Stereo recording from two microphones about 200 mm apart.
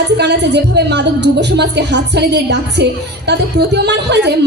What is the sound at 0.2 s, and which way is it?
A woman's voice, 60° right (ahead or behind).